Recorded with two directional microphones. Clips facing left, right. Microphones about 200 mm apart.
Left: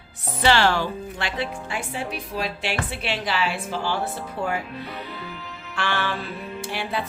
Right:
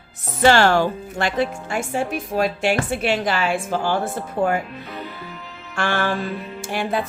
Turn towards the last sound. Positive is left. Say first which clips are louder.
# right 5 dB
turn(degrees=-45)  # may be behind; listen again after turning